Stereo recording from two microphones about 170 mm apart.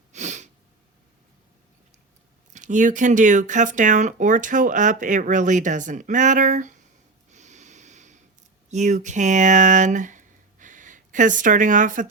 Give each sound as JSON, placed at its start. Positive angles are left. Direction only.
{"t": 0.1, "sound": "sneeze", "side_deg": -45}
{"t": 2.5, "sound": "speech", "side_deg": -45}
{"t": 7.3, "sound": "snort", "side_deg": -45}
{"t": 8.7, "sound": "speech", "side_deg": -45}